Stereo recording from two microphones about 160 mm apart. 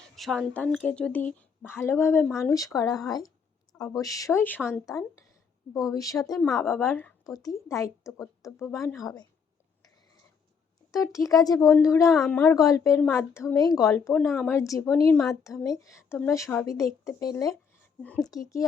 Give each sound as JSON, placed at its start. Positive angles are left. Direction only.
{"t": 0.2, "sound": "a woman's voice", "side_deg": 0}
{"t": 7.3, "sound": "a woman's voice", "side_deg": 20}
{"t": 10.9, "sound": "a woman's voice", "side_deg": 20}
{"t": 12.1, "sound": "speech", "side_deg": 0}
{"t": 12.4, "sound": "a woman's voice", "side_deg": 20}
{"t": 14.1, "sound": "speech", "side_deg": 5}
{"t": 14.5, "sound": "a woman's voice", "side_deg": 20}
{"t": 18.0, "sound": "a woman's voice", "side_deg": 10}
{"t": 18.3, "sound": "a woman's voice", "side_deg": 20}